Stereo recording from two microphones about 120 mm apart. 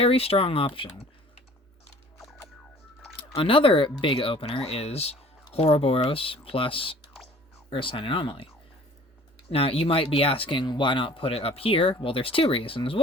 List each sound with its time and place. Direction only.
0.0 s speech: 55° left (ahead or behind)
3.2 s speech: 50° left (ahead or behind)
9.5 s speech: 55° left (ahead or behind)